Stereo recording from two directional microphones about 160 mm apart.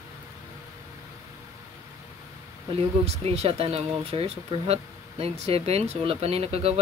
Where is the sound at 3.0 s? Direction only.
40° right (ahead or behind).